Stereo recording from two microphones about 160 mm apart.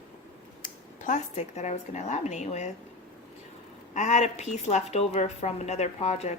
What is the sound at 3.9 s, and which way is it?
A woman's voice, 45° left (ahead or behind).